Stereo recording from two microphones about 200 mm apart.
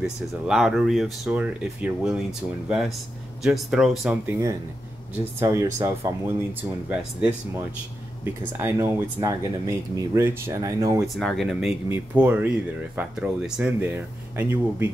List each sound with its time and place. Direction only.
0.0 s speech: centre (ahead or behind)
3.4 s speech: centre (ahead or behind)
11.1 s speech: centre (ahead or behind)